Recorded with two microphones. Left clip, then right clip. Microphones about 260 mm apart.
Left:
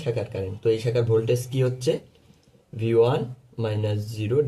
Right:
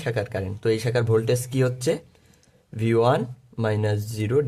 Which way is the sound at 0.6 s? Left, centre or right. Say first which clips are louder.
Left 1 dB; right.